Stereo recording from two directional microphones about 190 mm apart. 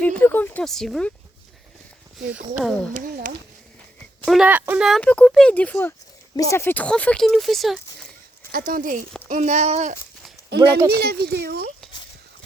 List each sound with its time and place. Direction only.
0.0 s speech: 10° left (ahead or behind)
2.6 s speech: centre (ahead or behind)
2.9 s speech: 45° right (ahead or behind)
4.3 s speech: 5° right (ahead or behind)
8.5 s speech: 50° right (ahead or behind)
10.5 s speech: 60° right (ahead or behind)